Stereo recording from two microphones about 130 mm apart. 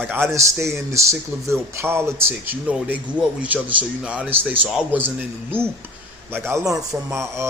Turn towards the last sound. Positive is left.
turn(degrees=-20)  # may be behind; listen again after turning